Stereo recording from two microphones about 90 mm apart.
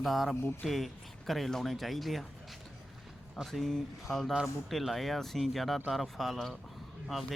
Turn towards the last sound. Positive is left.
turn(degrees=0)  # may be behind; listen again after turning